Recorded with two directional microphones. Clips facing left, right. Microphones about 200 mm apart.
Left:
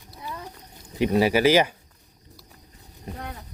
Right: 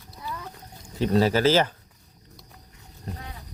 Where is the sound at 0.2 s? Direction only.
20° left (ahead or behind).